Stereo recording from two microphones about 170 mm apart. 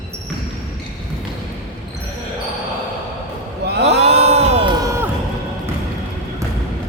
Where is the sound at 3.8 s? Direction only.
40° right (ahead or behind).